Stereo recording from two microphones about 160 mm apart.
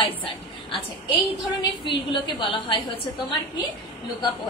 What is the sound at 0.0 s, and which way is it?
Speech, 35° left (ahead or behind).